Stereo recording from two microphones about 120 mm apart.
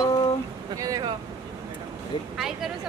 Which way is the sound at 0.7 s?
30° right (ahead or behind).